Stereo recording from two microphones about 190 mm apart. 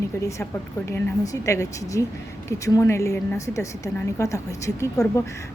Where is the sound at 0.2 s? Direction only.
15° left (ahead or behind).